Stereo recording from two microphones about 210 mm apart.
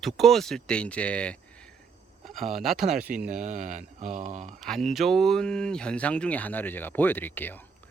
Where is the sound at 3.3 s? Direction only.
35° right (ahead or behind).